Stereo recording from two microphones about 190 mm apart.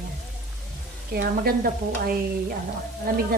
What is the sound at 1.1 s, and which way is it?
A woman's voice, 50° right (ahead or behind).